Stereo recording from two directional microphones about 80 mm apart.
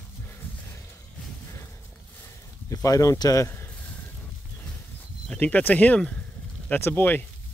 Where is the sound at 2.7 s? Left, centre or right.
Left.